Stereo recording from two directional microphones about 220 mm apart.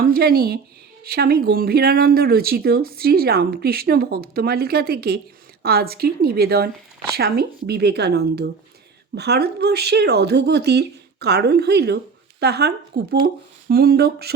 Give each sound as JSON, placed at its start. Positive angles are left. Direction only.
{"t": 0.0, "sound": "speech", "side_deg": -45}